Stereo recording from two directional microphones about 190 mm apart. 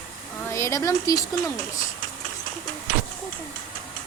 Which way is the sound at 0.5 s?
15° left (ahead or behind).